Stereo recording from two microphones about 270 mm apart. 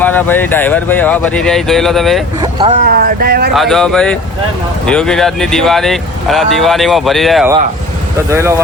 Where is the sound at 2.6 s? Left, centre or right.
Right.